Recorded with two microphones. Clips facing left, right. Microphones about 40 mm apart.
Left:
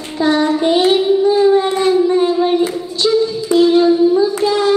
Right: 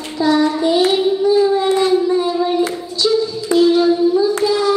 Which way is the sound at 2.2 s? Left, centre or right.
Left.